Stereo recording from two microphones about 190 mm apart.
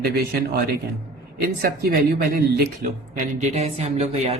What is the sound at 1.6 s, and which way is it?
Speech, 50° right (ahead or behind).